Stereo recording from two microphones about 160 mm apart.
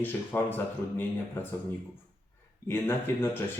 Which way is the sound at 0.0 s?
10° left (ahead or behind).